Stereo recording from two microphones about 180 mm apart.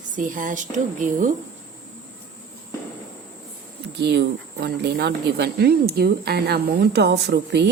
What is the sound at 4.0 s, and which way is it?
Speech, 70° right (ahead or behind).